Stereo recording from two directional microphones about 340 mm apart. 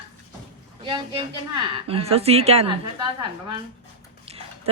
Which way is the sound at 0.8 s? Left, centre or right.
Centre.